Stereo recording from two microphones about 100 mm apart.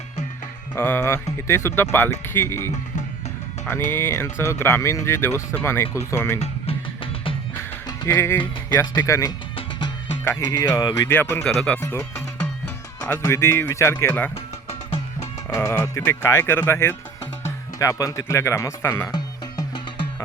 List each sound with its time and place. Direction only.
0.8 s speech: 20° left (ahead or behind)
6.4 s music: 70° left (ahead or behind)
7.9 s music: 40° left (ahead or behind)
8.4 s speech: 45° left (ahead or behind)
10.5 s speech: 40° left (ahead or behind)
11.1 s speech: 20° left (ahead or behind)
11.4 s speech: 10° left (ahead or behind)
11.8 s speech: 30° left (ahead or behind)
15.4 s speech: 25° left (ahead or behind)
17.7 s speech: 35° left (ahead or behind)
19.1 s music: 45° left (ahead or behind)